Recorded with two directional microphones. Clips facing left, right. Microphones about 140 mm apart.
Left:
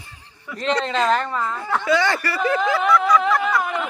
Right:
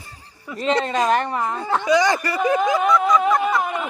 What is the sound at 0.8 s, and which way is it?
A woman's voice, 15° right (ahead or behind).